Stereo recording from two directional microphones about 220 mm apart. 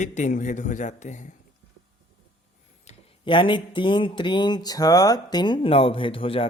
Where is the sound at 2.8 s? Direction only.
30° left (ahead or behind).